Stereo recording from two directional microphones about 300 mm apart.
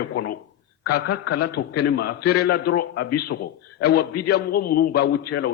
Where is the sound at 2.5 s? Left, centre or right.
Left.